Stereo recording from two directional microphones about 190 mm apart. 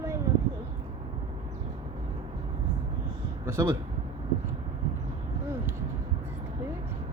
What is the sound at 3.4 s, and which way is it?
Speech, 15° right (ahead or behind).